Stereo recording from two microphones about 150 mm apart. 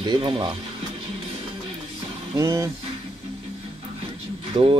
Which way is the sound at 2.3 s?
20° right (ahead or behind).